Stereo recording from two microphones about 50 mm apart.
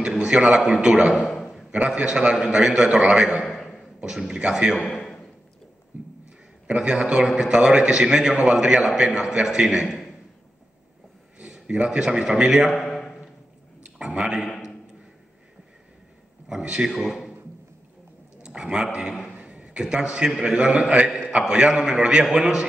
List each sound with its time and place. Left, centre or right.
0.0 s a man's voice: centre
1.3 s a sound: centre
1.9 s a man's voice: centre
3.4 s a sound: centre
4.3 s a man's voice: centre
5.9 s a sound: right
6.7 s a man's voice: right
11.4 s a man's voice: centre
13.8 s a man's voice: right
16.4 s a man's voice: centre
18.4 s a sound: centre
19.8 s a man's voice: centre
20.5 s a man's voice: right